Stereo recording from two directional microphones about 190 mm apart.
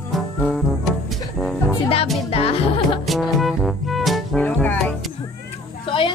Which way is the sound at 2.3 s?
30° left (ahead or behind).